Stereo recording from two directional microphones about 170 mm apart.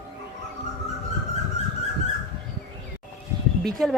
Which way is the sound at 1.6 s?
40° left (ahead or behind).